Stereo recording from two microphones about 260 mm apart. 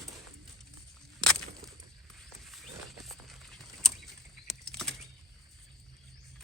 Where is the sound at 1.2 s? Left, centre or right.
Centre.